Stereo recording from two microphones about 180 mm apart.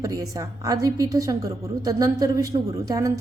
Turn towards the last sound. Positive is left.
turn(degrees=-20)  # may be behind; listen again after turning